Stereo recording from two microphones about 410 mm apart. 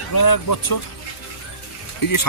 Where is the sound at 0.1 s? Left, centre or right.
Left.